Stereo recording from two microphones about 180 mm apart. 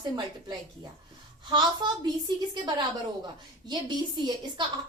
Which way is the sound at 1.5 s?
25° right (ahead or behind).